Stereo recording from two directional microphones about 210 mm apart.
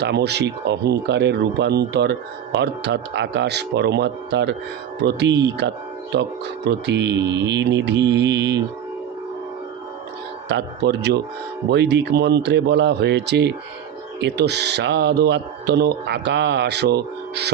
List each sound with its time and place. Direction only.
0.0 s speech: 50° right (ahead or behind)
7.3 s mantra: 55° right (ahead or behind)
10.5 s speech: 55° right (ahead or behind)